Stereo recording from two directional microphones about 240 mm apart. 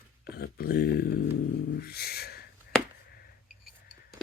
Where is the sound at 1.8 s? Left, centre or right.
Left.